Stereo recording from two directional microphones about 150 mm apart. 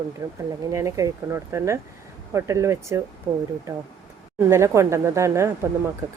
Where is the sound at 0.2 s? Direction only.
20° right (ahead or behind).